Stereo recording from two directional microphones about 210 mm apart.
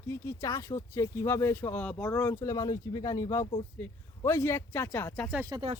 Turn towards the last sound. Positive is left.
turn(degrees=-25)  # may be behind; listen again after turning